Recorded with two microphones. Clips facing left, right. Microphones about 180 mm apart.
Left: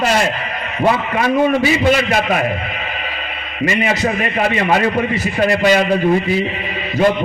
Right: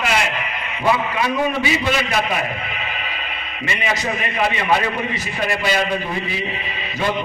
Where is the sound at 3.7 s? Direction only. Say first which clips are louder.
Left 5 dB; 45° left (ahead or behind).